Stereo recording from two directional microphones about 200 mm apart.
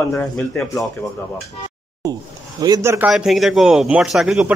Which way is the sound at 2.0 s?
20° right (ahead or behind).